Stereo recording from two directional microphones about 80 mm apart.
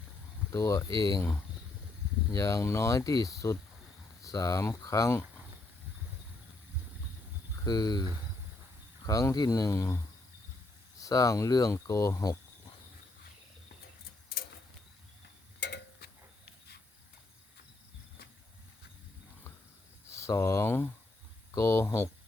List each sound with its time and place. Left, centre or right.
0.5 s speech: left
2.3 s speech: left
7.6 s speech: left
9.0 s speech: left
9.6 s speech: left
11.0 s speech: left
20.1 s speech: left